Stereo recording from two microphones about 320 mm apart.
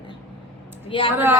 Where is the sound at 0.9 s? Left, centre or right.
Centre.